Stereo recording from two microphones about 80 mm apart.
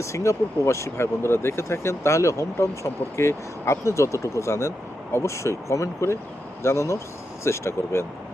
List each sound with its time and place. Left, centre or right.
0.0 s speech: left